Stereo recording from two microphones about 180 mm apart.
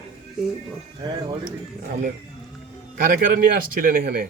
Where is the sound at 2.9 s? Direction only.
50° right (ahead or behind).